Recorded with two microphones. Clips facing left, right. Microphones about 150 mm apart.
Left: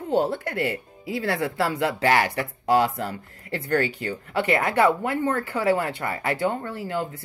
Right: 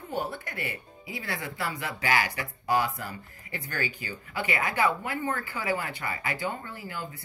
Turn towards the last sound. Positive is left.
turn(degrees=70)  # may be behind; listen again after turning